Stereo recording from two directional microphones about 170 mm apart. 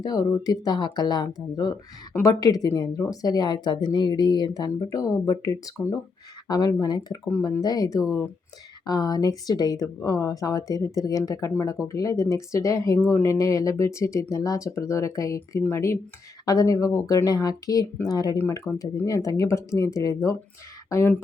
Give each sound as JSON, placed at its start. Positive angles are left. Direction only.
{"t": 0.0, "sound": "speech", "side_deg": 20}